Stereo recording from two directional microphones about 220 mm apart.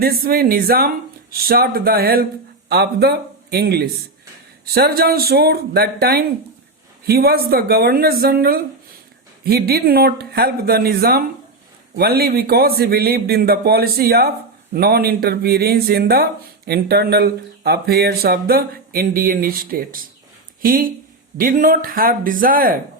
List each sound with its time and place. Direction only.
0.0 s a man's voice: 45° right (ahead or behind)